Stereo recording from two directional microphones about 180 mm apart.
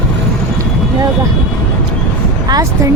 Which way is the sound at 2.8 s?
15° right (ahead or behind).